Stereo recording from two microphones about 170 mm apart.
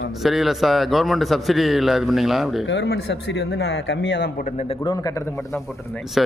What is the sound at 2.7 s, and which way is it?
Speech, 80° left.